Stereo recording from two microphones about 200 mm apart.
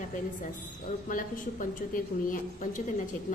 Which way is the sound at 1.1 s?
40° left (ahead or behind).